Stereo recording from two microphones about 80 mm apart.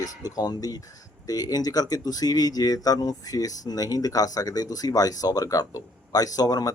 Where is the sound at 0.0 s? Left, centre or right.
Left.